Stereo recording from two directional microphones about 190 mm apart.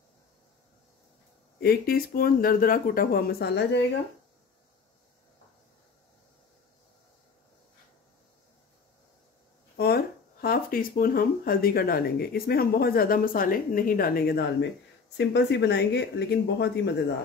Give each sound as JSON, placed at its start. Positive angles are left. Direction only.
{"t": 1.6, "sound": "speech", "side_deg": 55}
{"t": 9.8, "sound": "speech", "side_deg": 55}